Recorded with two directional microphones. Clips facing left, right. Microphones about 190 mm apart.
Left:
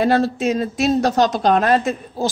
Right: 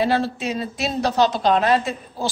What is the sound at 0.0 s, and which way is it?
Speech, 45° left (ahead or behind).